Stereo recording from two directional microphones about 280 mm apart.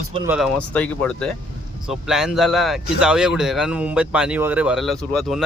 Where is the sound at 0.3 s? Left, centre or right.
Centre.